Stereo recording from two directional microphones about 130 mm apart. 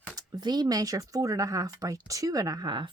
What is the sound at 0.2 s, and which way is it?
A woman's voice, 30° right (ahead or behind).